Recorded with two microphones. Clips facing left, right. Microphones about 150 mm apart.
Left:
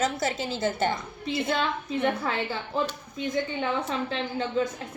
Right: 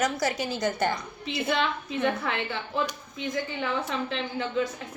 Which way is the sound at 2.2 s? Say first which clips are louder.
Left 1 dB; 35° left (ahead or behind).